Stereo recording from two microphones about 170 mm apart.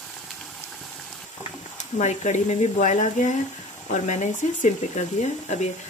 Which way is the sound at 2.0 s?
45° left (ahead or behind).